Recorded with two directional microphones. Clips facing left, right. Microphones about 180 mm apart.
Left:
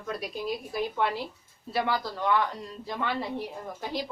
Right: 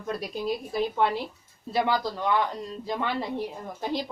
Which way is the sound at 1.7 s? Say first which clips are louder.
Right 3 dB; 20° right (ahead or behind).